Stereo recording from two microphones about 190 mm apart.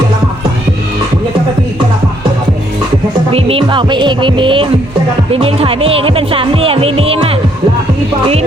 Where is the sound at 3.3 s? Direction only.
30° right (ahead or behind).